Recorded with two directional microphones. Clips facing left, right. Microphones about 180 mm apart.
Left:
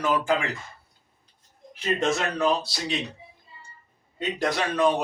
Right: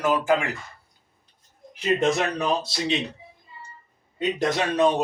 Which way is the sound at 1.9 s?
20° right (ahead or behind).